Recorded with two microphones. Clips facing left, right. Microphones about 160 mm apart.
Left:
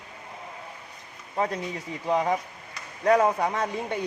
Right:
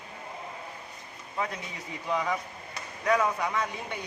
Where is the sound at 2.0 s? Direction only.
35° left (ahead or behind).